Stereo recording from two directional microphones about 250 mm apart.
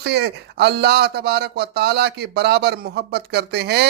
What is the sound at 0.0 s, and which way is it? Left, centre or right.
Speech, right.